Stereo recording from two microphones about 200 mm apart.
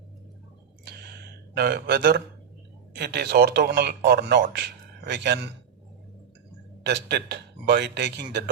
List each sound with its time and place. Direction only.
1.5 s speech: 55° right (ahead or behind)
6.8 s speech: 60° right (ahead or behind)